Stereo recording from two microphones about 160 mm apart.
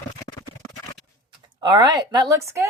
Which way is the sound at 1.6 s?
25° right (ahead or behind).